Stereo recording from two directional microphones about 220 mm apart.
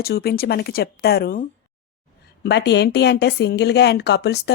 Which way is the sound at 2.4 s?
50° left (ahead or behind).